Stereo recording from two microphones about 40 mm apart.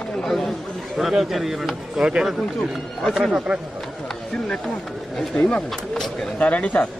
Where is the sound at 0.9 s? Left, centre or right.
Centre.